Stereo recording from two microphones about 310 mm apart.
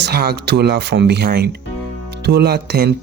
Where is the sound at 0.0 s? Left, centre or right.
Right.